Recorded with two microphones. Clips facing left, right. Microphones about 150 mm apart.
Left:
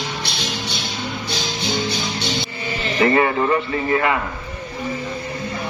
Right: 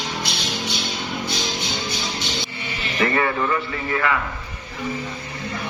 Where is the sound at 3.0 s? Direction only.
25° left (ahead or behind).